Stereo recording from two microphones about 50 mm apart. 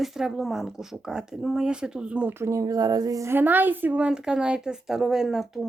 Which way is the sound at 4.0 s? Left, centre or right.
Centre.